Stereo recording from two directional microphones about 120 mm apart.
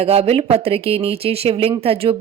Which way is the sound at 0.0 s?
55° right (ahead or behind).